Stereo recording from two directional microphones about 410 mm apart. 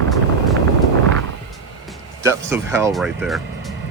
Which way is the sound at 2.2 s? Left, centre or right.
Centre.